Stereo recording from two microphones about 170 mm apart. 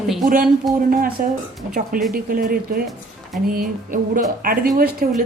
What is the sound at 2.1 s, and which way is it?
Speech, 55° right (ahead or behind).